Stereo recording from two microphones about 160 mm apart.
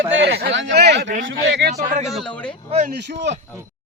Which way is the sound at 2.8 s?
90° right.